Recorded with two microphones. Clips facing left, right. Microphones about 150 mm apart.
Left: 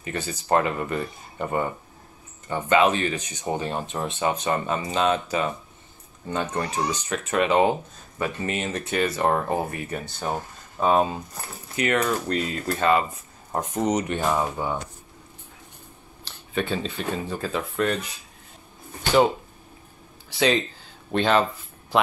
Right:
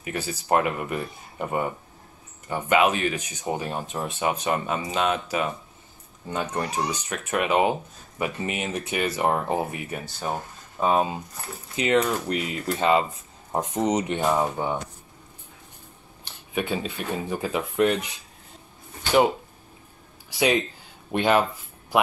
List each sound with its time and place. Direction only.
0.0 s speech: 10° right (ahead or behind)
11.7 s speech: 20° right (ahead or behind)
16.3 s speech: 10° right (ahead or behind)
20.2 s speech: 10° right (ahead or behind)